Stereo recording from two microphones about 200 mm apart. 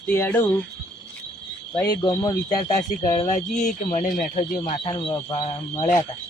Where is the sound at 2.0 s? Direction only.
20° left (ahead or behind).